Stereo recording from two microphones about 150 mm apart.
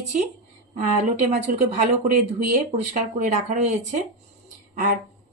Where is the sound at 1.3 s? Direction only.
50° right (ahead or behind).